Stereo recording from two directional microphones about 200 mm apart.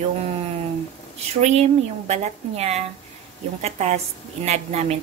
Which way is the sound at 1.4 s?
35° right (ahead or behind).